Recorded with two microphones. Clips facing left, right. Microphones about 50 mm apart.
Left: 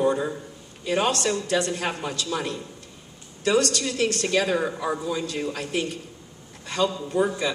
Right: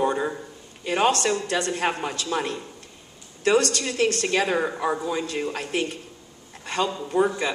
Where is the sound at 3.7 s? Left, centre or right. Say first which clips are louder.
Right 1 dB; right.